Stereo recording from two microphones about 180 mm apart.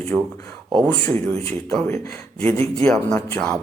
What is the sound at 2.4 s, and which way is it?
Speech, 10° left (ahead or behind).